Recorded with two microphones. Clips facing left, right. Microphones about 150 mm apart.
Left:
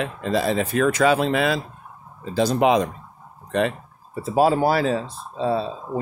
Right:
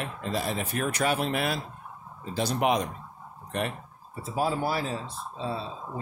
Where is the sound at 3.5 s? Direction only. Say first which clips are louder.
Left 9 dB; 90° left.